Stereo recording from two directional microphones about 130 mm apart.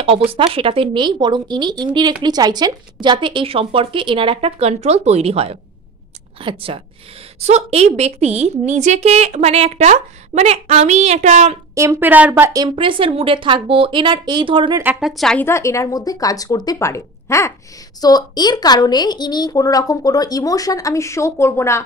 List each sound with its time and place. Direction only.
0.0 s a woman's voice: 45° right (ahead or behind)
7.3 s a woman's voice: 55° right (ahead or behind)
11.7 s speech: 20° right (ahead or behind)
12.6 s a woman's voice: 40° right (ahead or behind)
15.0 s a woman's voice: centre (ahead or behind)
15.4 s a woman's voice: 20° left (ahead or behind)